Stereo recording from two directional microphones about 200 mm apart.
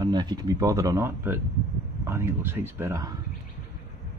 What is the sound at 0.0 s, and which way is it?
Speech, 20° right (ahead or behind).